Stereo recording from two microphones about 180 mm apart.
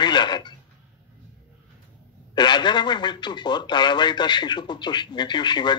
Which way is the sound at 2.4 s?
25° left (ahead or behind).